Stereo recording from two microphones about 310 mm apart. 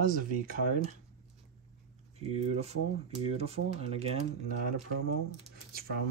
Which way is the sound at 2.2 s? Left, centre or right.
Right.